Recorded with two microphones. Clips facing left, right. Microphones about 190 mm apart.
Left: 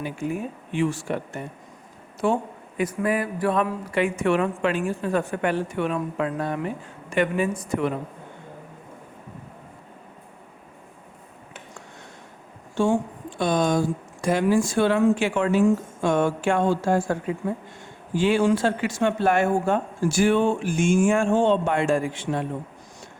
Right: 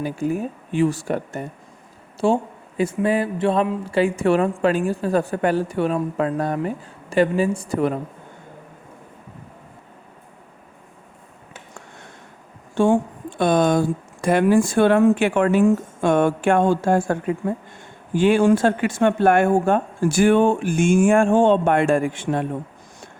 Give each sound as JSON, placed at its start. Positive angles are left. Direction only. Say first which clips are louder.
{"t": 0.0, "sound": "speech", "louder": "right 5 dB", "side_deg": -40}
{"t": 2.2, "sound": "speech", "louder": "right 4 dB", "side_deg": -30}
{"t": 12.7, "sound": "speech", "louder": "right 4 dB", "side_deg": -55}